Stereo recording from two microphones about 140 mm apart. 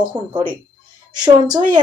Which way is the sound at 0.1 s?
35° right (ahead or behind).